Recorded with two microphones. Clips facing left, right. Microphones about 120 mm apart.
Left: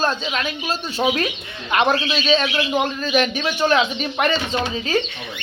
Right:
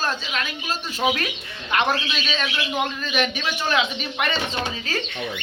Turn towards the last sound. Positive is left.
turn(degrees=15)  # may be behind; listen again after turning